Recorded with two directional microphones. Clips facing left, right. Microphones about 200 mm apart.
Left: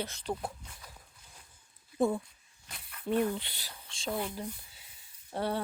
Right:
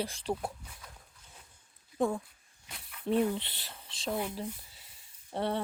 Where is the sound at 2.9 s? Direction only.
Centre (ahead or behind).